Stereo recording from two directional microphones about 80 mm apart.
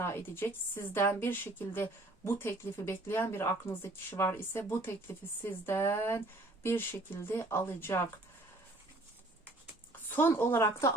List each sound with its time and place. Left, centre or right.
0.0 s a woman's voice: left
10.1 s a woman's voice: left